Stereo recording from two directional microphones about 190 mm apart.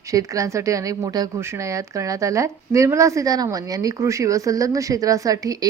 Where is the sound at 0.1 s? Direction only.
15° right (ahead or behind).